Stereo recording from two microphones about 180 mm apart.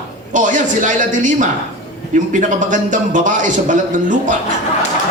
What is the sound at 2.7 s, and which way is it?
Speech, 45° right (ahead or behind).